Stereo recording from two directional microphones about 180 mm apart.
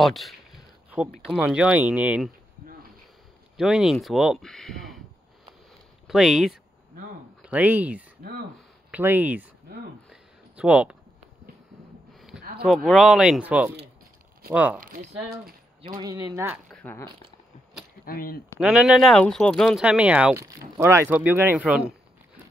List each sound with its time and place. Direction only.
0.0 s speech: centre (ahead or behind)
1.4 s speech: 5° right (ahead or behind)
3.5 s speech: centre (ahead or behind)
6.0 s speech: centre (ahead or behind)
8.2 s speech: 60° right (ahead or behind)
8.5 s speech: 10° right (ahead or behind)
10.0 s a sound: 5° right (ahead or behind)
12.1 s a sound: centre (ahead or behind)
12.6 s speech: centre (ahead or behind)
14.8 s speech: 50° right (ahead or behind)
16.0 s speech: 20° right (ahead or behind)
16.7 s speech: 10° left (ahead or behind)
18.0 s speech: 55° left (ahead or behind)
18.6 s speech: 5° right (ahead or behind)